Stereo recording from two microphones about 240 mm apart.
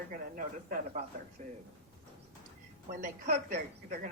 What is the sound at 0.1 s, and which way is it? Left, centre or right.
Speech, right.